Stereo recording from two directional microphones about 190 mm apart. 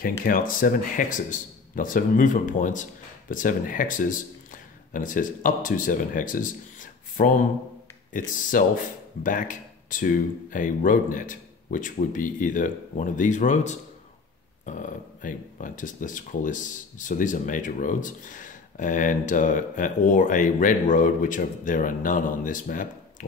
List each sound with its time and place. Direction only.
0.2 s speech: 45° left (ahead or behind)